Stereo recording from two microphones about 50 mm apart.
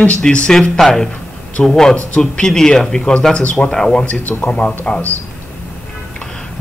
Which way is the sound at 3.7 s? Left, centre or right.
Centre.